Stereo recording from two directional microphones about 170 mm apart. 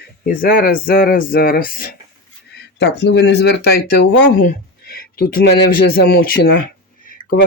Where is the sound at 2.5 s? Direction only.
85° left.